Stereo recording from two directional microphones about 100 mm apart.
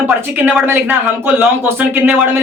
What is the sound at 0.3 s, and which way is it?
Speech, 20° right (ahead or behind).